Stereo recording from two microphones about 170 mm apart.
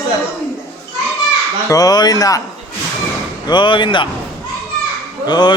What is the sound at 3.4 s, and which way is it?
Speech, 25° left (ahead or behind).